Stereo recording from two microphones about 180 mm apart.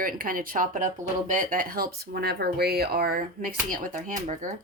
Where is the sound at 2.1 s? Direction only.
65° right (ahead or behind); by 4.6 s 45° right (ahead or behind).